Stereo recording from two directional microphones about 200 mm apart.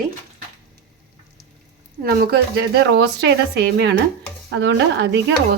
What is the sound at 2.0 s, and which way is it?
A woman's voice, 50° right (ahead or behind).